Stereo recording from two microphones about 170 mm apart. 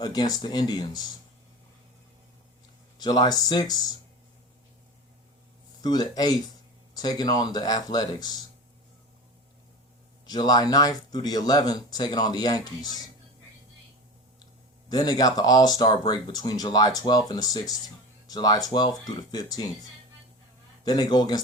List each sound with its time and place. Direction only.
0.0 s speech: 25° left (ahead or behind)
3.0 s speech: 25° left (ahead or behind)
5.8 s speech: 25° left (ahead or behind)
10.2 s speech: 25° left (ahead or behind)
14.8 s speech: 25° left (ahead or behind)
20.8 s speech: 25° left (ahead or behind)